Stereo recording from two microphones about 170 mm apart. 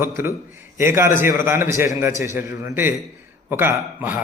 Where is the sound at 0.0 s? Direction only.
15° right (ahead or behind).